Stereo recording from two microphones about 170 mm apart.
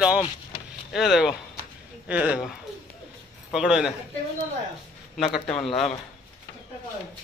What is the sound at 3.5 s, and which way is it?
Speech, 5° right (ahead or behind).